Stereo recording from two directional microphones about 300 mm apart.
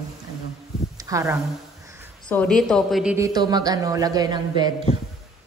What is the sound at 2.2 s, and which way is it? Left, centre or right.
A man's voice, centre.